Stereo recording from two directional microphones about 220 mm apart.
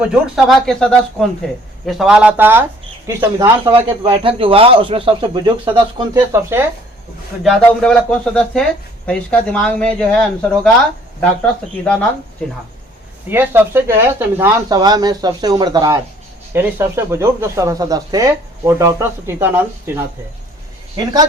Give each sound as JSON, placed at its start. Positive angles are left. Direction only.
{"t": 0.0, "sound": "speech", "side_deg": 0}
{"t": 3.8, "sound": "speech", "side_deg": -25}
{"t": 7.4, "sound": "speech", "side_deg": 0}
{"t": 13.2, "sound": "speech", "side_deg": -10}
{"t": 20.9, "sound": "speech", "side_deg": -20}